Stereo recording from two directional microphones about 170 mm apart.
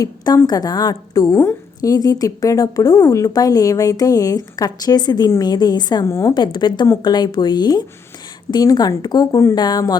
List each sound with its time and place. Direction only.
0.0 s a woman's voice: 20° left (ahead or behind)